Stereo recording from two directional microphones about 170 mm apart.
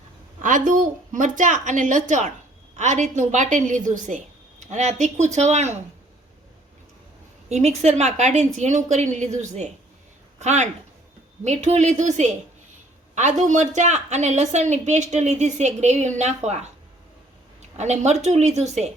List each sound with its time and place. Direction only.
0.4 s a woman's voice: 50° right (ahead or behind)
7.5 s a woman's voice: 40° right (ahead or behind)
17.7 s a woman's voice: 40° right (ahead or behind)